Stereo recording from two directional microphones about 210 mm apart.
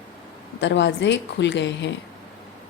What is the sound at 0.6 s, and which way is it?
A woman's voice, 55° left (ahead or behind).